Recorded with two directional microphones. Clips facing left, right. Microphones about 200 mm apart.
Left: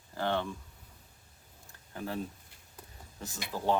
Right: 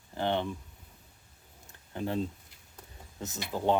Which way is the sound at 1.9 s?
25° right (ahead or behind).